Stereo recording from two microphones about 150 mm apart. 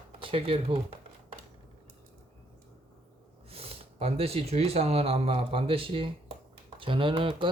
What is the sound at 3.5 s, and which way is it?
Speech, 40° right (ahead or behind).